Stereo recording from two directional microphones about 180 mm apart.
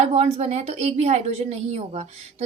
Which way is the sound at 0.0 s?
35° right (ahead or behind).